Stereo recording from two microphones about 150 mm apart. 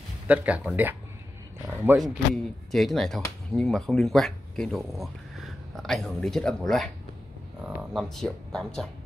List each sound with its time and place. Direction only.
0.3 s speech: 10° right (ahead or behind)
1.7 s a sound: 15° right (ahead or behind)
2.0 s speech: centre (ahead or behind)